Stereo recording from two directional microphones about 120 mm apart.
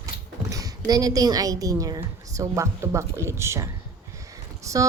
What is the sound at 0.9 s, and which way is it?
A woman's voice, 30° right (ahead or behind).